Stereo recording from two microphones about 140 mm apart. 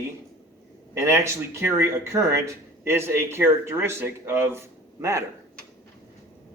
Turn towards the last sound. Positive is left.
turn(degrees=-20)  # may be behind; listen again after turning